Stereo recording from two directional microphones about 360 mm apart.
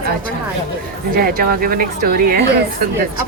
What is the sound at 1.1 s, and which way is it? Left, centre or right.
Speech, right.